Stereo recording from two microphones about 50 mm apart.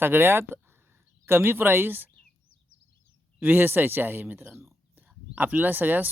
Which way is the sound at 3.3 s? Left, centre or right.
Right.